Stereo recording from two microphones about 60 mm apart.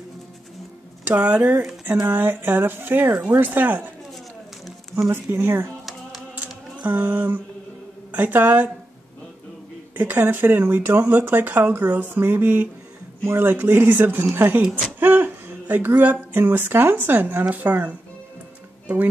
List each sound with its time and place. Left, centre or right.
1.0 s a woman's voice: right
2.0 s speech: right
5.1 s speech: right
6.3 s a sound: right
8.1 s a woman's voice: right
9.9 s speech: right
13.2 s speech: right
13.5 s a woman's voice: right